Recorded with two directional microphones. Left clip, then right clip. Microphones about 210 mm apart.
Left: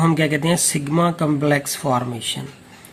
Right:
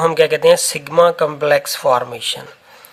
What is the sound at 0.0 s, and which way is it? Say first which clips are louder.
Speech: right 7 dB; 35° right (ahead or behind).